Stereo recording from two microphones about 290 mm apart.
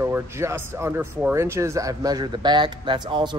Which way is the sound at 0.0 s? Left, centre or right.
Centre.